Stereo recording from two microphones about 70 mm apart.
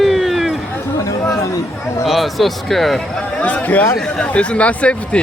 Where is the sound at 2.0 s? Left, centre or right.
Centre.